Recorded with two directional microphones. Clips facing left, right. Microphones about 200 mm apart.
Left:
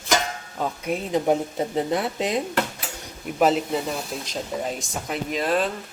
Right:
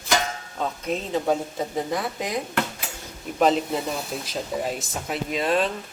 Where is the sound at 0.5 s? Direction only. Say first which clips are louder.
Left 1 dB; 10° left (ahead or behind); by 2.3 s 25° left (ahead or behind).